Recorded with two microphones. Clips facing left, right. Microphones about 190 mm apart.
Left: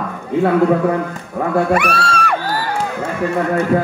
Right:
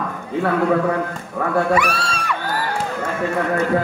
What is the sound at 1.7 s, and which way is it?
Speech, 60° left (ahead or behind).